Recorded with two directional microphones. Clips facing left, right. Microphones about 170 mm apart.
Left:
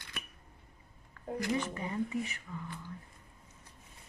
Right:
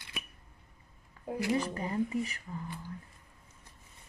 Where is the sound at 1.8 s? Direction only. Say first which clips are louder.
Right 3 dB; 35° right (ahead or behind).